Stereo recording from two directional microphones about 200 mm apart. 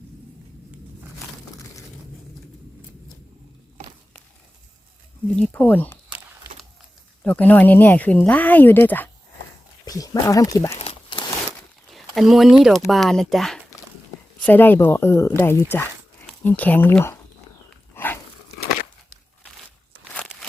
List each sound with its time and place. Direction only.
5.4 s speech: 10° left (ahead or behind)
7.3 s speech: 10° left (ahead or behind)
10.8 s crumpling: 25° left (ahead or behind)
11.9 s speech: centre (ahead or behind)
17.9 s dog: 10° left (ahead or behind)